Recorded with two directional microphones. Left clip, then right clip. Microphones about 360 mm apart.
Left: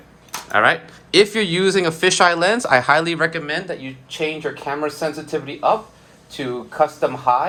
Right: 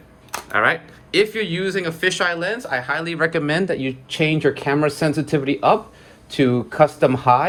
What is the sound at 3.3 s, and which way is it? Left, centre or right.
Speech, centre.